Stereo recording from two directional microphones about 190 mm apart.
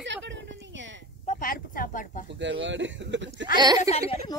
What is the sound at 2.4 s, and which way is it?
Speech, 70° right (ahead or behind).